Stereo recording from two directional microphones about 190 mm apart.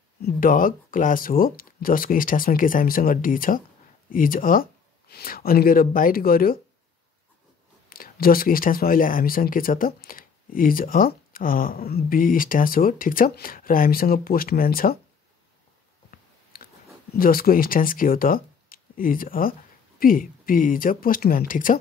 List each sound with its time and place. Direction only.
0.2 s speech: 50° left (ahead or behind)
7.9 s speech: 50° left (ahead or behind)
16.5 s a sound: 50° left (ahead or behind)
17.1 s speech: 50° left (ahead or behind)